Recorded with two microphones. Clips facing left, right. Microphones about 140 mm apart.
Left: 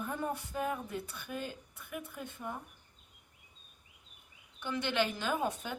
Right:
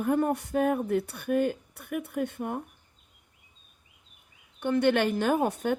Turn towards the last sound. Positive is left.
turn(degrees=-60)  # may be behind; listen again after turning